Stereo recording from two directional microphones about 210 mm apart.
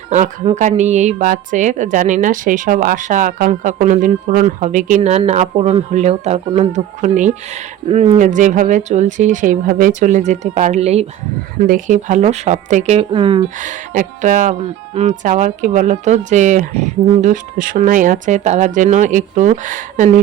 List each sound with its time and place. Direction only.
0.1 s a woman's voice: 35° right (ahead or behind)
13.6 s a woman's voice: 35° right (ahead or behind)